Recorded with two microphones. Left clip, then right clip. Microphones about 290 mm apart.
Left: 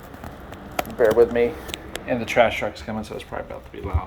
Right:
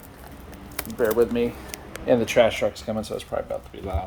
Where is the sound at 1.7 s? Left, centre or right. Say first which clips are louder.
Left 5 dB; centre.